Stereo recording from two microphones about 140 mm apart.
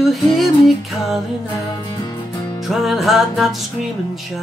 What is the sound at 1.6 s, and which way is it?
Music, 30° left (ahead or behind).